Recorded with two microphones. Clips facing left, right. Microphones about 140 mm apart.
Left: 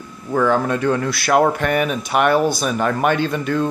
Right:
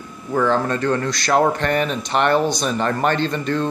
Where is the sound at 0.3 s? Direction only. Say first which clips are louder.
Left 1 dB; 5° left (ahead or behind).